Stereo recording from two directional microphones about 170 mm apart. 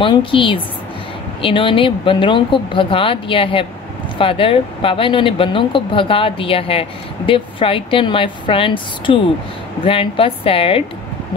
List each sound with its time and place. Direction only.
0.0 s speech: 30° left (ahead or behind)